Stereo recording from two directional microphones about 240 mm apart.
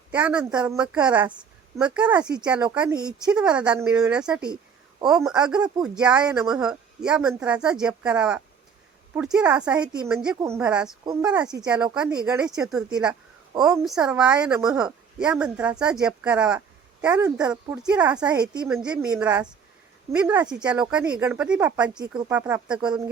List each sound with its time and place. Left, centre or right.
0.1 s speech: centre
4.4 s a sound: centre
5.0 s speech: centre